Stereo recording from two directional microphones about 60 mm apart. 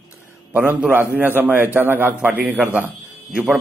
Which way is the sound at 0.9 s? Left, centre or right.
Right.